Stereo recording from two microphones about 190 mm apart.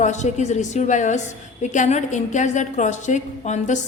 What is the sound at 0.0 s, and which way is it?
A woman's voice, 35° left (ahead or behind).